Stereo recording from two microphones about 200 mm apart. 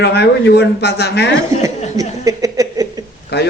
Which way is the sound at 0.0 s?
55° left (ahead or behind).